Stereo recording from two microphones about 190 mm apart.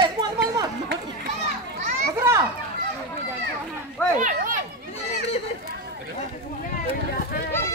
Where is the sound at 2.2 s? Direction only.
15° right (ahead or behind).